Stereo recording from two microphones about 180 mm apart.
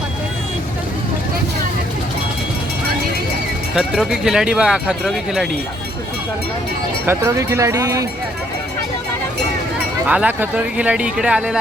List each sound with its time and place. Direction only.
3.8 s speech: 5° right (ahead or behind)
7.0 s speech: 15° right (ahead or behind)
10.1 s speech: 10° right (ahead or behind)